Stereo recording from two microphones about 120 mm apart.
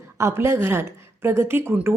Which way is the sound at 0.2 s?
20° right (ahead or behind).